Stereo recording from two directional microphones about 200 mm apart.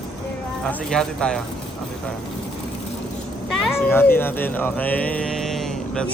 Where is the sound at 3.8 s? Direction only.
10° left (ahead or behind).